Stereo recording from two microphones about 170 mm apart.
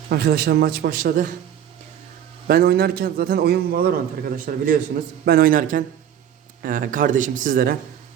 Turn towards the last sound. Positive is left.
turn(degrees=-55)  # may be behind; listen again after turning